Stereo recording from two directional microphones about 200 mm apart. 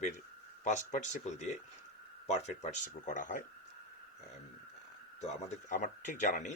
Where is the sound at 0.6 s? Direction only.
40° left (ahead or behind).